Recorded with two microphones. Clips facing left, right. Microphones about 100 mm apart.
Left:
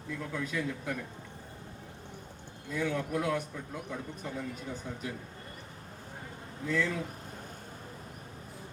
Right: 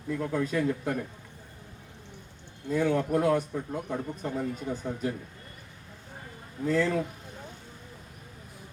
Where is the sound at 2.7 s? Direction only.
40° right (ahead or behind).